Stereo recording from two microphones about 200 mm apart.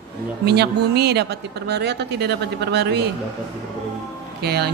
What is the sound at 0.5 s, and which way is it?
Speech, 55° right (ahead or behind).